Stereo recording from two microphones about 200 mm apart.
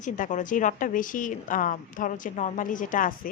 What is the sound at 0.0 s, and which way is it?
A woman's voice, 40° left (ahead or behind).